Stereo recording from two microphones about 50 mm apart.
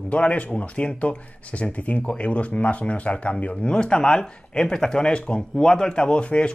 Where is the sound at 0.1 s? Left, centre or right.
Left.